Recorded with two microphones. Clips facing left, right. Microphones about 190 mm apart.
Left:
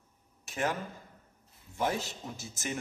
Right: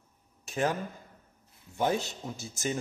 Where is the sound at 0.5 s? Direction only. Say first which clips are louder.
Right 3 dB; 25° right (ahead or behind).